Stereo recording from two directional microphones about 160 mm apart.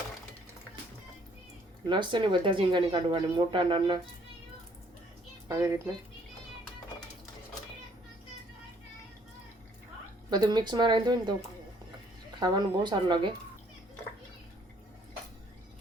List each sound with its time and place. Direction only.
1.9 s speech: 30° right (ahead or behind)
5.5 s a child's voice: 20° right (ahead or behind)
10.2 s speech: 25° right (ahead or behind)
12.4 s speech: 25° right (ahead or behind)